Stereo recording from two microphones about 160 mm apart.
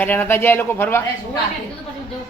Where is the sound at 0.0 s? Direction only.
10° left (ahead or behind).